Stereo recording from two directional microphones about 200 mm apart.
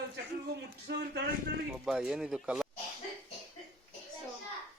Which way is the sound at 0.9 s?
55° right (ahead or behind).